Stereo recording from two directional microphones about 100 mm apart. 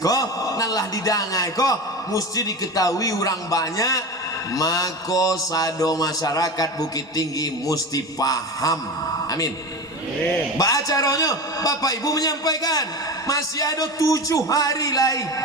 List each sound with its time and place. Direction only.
0.0 s a man's voice: 35° left (ahead or behind)
10.6 s a man's voice: 35° left (ahead or behind)